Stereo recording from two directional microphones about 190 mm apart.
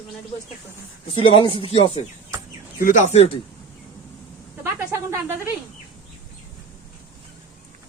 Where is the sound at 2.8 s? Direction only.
45° left (ahead or behind).